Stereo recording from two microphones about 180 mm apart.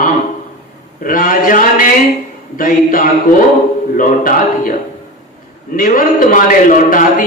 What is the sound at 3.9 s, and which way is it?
Speech, 50° left (ahead or behind).